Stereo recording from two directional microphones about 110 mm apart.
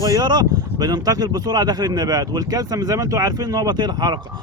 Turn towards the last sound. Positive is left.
turn(degrees=-40)  # may be behind; listen again after turning